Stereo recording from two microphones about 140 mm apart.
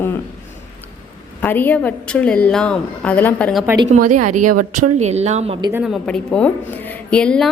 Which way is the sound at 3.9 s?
65° right (ahead or behind).